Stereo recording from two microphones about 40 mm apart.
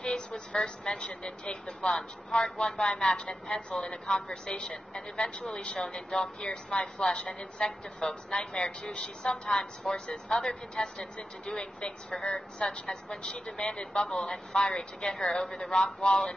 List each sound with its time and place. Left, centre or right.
0.5 s a woman's voice: centre
2.5 s a woman's voice: left
10.2 s a woman's voice: centre
13.7 s a woman's voice: left
14.0 s a woman's voice: centre